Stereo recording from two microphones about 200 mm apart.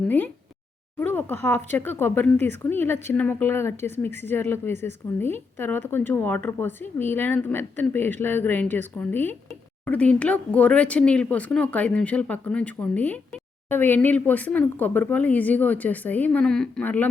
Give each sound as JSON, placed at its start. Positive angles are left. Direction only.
{"t": 0.9, "sound": "speech", "side_deg": 10}